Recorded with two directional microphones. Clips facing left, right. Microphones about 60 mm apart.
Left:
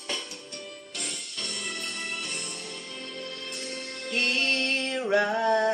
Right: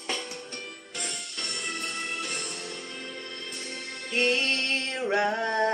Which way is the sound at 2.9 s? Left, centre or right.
Right.